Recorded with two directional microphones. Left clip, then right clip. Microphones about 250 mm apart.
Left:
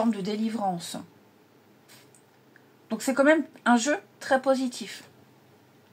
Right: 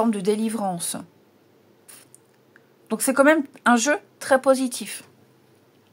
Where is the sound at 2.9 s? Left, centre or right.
Right.